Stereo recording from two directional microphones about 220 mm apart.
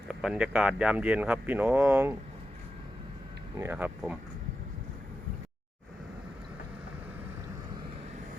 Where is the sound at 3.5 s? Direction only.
10° right (ahead or behind).